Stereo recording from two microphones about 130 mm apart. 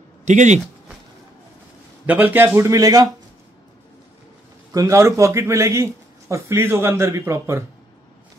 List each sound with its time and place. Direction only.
0.2 s speech: 65° right (ahead or behind)
2.0 s a man's voice: 15° right (ahead or behind)
2.7 s a man's voice: 30° right (ahead or behind)
4.7 s a man's voice: 25° right (ahead or behind)